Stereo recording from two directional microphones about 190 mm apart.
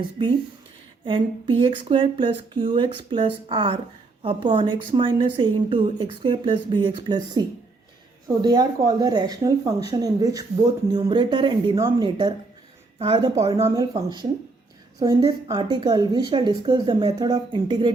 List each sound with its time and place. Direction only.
1.0 s speech: 25° right (ahead or behind)
11.8 s speech: 15° right (ahead or behind)
12.0 s speech: 25° right (ahead or behind)